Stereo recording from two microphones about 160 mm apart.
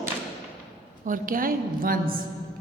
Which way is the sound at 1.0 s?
55° right (ahead or behind).